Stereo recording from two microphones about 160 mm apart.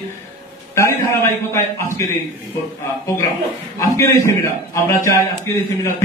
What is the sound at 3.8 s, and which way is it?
A man's voice, 20° left (ahead or behind).